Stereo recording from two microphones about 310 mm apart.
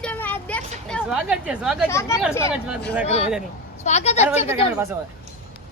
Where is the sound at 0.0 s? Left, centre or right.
Centre.